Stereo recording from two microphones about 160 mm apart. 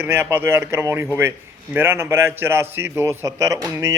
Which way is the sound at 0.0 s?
15° right (ahead or behind).